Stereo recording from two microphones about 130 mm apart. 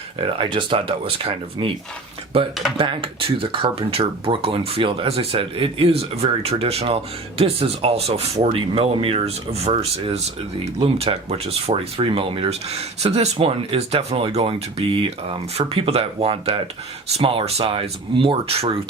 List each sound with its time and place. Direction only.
0.2 s speech: 40° right (ahead or behind)
2.7 s speech: 40° right (ahead or behind)